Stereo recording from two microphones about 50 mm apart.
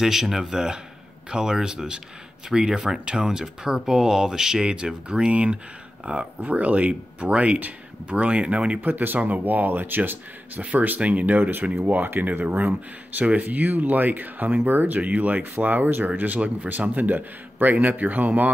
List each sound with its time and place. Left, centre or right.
0.0 s speech: centre
8.8 s speech: right